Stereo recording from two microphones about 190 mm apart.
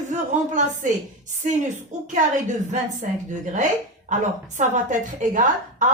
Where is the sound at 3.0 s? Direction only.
40° right (ahead or behind).